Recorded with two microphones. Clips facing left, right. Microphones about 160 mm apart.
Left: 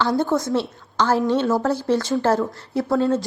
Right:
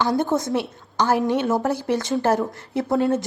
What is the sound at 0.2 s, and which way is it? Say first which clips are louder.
A woman's voice: left 1 dB; 20° right (ahead or behind).